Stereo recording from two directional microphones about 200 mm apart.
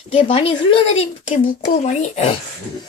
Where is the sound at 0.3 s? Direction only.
25° left (ahead or behind).